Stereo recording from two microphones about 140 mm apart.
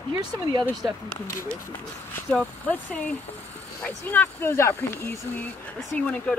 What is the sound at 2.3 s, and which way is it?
Speech, 10° left (ahead or behind).